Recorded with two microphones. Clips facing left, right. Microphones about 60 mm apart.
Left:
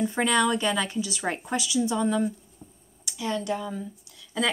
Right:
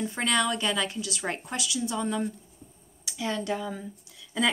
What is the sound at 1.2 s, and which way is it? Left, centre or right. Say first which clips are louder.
Speech: left 2 dB; centre.